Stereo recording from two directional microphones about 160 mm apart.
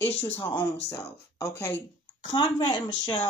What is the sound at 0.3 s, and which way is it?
Speech, 30° left (ahead or behind).